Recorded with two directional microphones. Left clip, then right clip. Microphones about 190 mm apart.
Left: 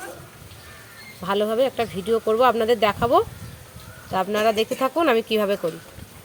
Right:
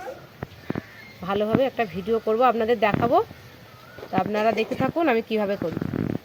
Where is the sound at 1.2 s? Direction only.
15° left (ahead or behind).